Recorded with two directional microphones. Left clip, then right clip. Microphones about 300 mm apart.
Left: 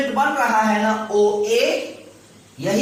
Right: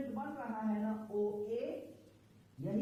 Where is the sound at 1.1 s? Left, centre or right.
Left.